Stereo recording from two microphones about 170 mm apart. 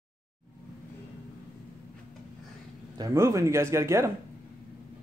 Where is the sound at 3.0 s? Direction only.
20° right (ahead or behind).